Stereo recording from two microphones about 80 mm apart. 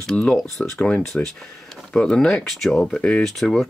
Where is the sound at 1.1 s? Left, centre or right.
Centre.